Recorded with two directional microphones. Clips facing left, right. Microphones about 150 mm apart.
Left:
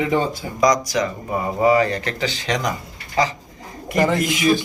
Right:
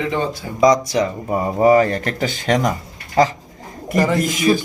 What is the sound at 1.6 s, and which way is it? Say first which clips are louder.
Speech: right 3 dB; 45° right (ahead or behind).